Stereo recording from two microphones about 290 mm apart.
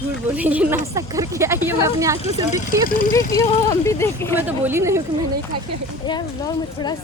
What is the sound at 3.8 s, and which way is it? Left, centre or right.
Speech, centre.